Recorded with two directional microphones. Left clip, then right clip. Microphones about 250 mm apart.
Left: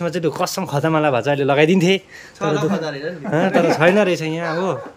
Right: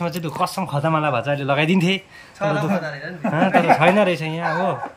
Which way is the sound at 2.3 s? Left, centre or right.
Centre.